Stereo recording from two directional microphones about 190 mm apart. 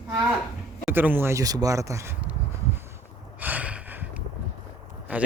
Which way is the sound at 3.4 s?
10° right (ahead or behind).